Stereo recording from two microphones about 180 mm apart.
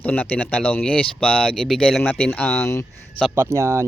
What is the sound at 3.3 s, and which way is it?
Speech, 15° right (ahead or behind).